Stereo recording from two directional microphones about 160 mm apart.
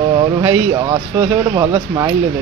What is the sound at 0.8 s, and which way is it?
Speech, 30° right (ahead or behind).